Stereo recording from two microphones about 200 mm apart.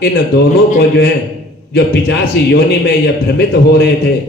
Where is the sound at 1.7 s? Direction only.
55° left (ahead or behind).